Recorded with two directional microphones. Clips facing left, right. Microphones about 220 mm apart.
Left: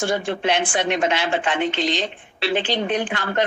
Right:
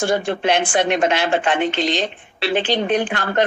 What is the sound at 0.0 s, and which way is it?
A woman's voice, 45° right (ahead or behind).